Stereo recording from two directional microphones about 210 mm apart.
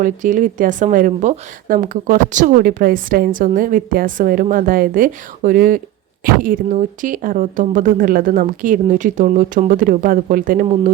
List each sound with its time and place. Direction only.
0.0 s a woman's voice: 35° right (ahead or behind)